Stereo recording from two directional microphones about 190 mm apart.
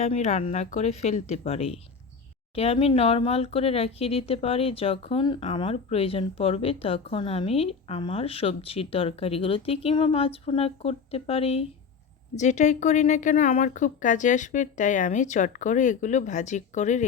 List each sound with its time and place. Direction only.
0.0 s speech: 35° left (ahead or behind)